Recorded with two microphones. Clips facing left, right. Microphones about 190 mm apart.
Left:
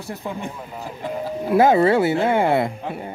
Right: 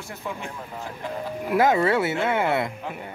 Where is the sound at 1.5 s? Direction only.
30° left (ahead or behind).